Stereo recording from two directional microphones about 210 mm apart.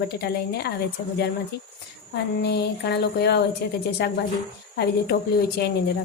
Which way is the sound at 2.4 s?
55° left (ahead or behind).